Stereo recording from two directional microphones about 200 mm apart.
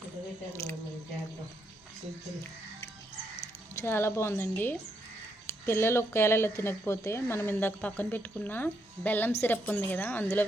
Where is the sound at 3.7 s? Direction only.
10° left (ahead or behind).